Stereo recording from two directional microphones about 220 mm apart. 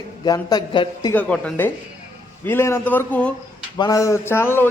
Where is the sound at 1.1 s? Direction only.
5° left (ahead or behind).